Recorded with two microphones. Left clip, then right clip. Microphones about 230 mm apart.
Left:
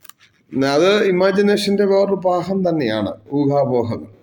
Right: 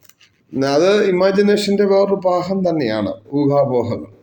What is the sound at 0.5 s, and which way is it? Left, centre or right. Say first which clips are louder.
Speech: right 1 dB; centre.